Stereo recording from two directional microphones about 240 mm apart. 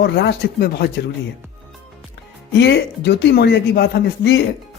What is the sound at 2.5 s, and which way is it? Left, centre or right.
Speech, left.